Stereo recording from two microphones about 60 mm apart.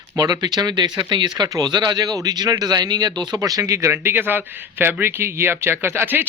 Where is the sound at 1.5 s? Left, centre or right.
Right.